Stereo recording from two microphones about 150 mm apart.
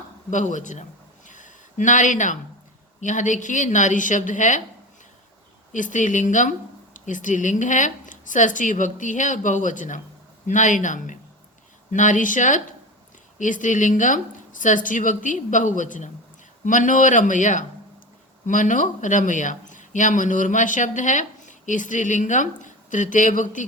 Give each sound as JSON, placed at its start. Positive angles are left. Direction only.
{"t": 0.3, "sound": "speech", "side_deg": 55}
{"t": 1.3, "sound": "a sound", "side_deg": 55}
{"t": 3.0, "sound": "speech", "side_deg": 55}
{"t": 5.7, "sound": "speech", "side_deg": 60}